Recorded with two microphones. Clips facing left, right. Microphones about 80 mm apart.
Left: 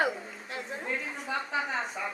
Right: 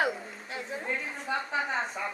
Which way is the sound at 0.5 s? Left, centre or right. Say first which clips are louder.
Right 1 dB; centre.